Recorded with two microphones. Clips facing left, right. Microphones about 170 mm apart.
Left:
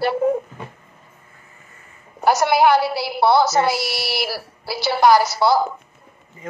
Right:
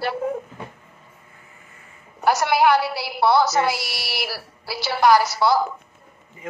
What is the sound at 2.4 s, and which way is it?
A woman's voice, 30° left (ahead or behind).